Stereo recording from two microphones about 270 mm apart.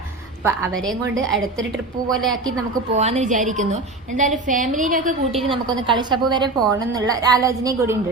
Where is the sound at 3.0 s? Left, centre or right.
Right.